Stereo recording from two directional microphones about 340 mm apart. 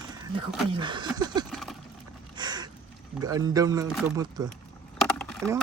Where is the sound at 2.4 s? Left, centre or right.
Centre.